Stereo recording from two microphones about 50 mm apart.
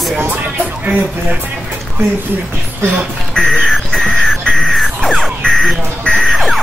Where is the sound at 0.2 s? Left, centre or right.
Right.